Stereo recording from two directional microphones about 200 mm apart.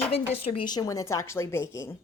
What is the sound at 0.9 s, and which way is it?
Speech, 15° left (ahead or behind).